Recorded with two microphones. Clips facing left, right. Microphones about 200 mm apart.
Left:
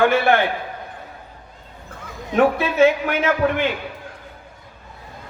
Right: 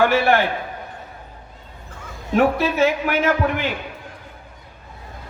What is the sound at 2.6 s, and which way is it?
Speech, 55° left (ahead or behind).